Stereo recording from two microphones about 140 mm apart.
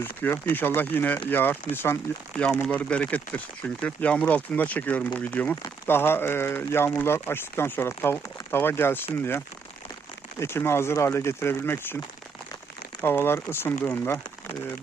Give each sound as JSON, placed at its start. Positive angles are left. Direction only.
{"t": 0.0, "sound": "speech", "side_deg": 15}
{"t": 2.4, "sound": "speech", "side_deg": 5}
{"t": 10.4, "sound": "speech", "side_deg": 15}
{"t": 13.0, "sound": "speech", "side_deg": 15}